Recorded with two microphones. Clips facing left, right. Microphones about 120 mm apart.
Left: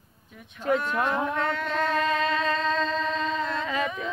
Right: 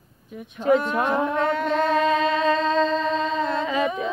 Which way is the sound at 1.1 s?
30° right (ahead or behind).